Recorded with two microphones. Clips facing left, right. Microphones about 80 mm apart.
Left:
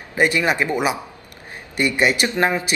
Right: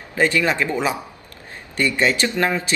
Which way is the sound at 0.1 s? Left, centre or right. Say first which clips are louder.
Even; centre.